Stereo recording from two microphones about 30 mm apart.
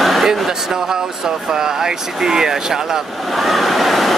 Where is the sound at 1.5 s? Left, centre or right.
Centre.